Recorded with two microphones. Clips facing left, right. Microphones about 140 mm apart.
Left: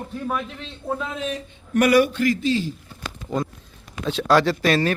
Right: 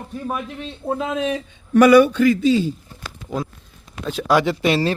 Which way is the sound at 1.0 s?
90° right.